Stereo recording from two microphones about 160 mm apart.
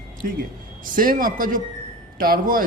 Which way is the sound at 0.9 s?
60° right (ahead or behind).